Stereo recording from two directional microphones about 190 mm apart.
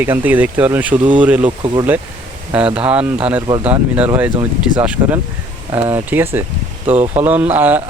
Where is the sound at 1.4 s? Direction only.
25° right (ahead or behind).